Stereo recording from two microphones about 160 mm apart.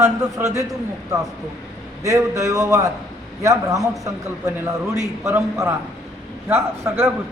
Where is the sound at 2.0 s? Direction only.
20° right (ahead or behind).